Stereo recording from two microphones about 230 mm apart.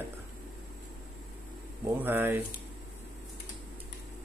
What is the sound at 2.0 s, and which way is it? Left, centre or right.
Speech, centre.